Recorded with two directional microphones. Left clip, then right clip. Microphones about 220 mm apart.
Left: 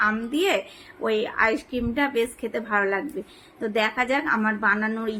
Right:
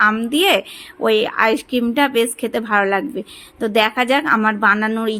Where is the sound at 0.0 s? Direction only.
45° right (ahead or behind).